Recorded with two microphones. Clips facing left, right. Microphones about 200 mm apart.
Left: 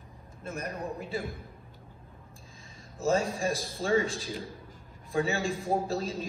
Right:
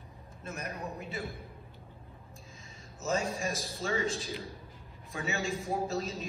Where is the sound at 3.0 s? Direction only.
30° left (ahead or behind).